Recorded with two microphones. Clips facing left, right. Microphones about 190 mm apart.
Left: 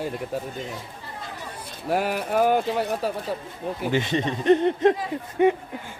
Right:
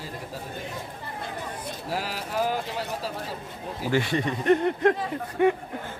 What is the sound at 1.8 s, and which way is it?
Speech, 55° left (ahead or behind).